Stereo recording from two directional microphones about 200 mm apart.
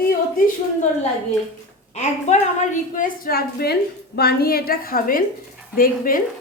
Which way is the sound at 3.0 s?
45° left (ahead or behind).